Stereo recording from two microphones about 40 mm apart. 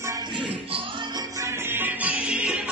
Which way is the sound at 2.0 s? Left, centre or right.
Right.